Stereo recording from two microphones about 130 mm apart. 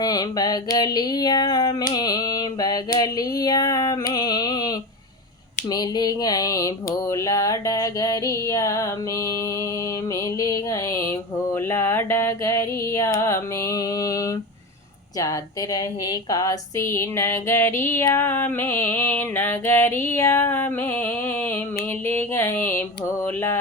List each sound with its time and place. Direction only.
0.0 s a sound: 30° left (ahead or behind)
5.7 s mantra: 30° left (ahead or behind)
10.3 s music: 25° left (ahead or behind)
11.5 s a sound: 20° left (ahead or behind)
15.2 s mantra: 25° left (ahead or behind)
18.0 s music: 20° left (ahead or behind)